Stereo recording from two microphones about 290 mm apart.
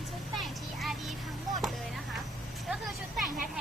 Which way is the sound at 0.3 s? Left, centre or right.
Centre.